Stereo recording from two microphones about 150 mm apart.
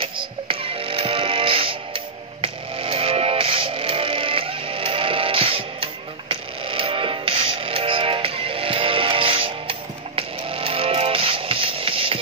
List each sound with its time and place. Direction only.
0.0 s music: 35° right (ahead or behind)